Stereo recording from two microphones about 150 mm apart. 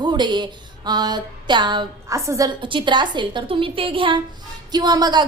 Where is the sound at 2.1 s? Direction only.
20° right (ahead or behind).